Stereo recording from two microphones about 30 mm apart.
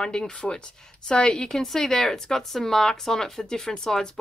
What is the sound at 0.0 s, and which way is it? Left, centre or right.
Speech, left.